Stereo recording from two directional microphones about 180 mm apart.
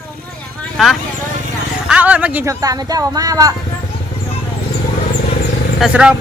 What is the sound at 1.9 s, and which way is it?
Speech, 10° right (ahead or behind).